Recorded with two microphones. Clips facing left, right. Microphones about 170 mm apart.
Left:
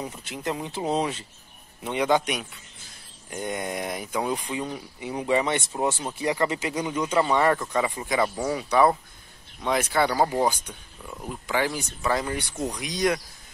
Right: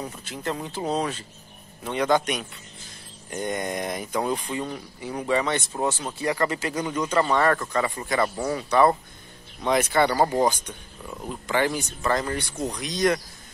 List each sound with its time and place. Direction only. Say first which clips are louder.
0.0 s speech: even; 20° left (ahead or behind)